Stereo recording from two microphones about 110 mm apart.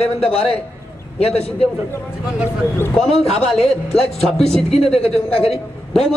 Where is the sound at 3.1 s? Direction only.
70° left (ahead or behind).